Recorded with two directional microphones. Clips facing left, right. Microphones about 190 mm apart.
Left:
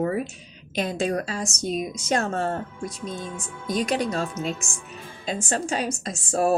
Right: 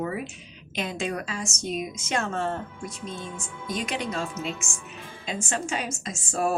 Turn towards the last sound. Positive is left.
turn(degrees=35)  # may be behind; listen again after turning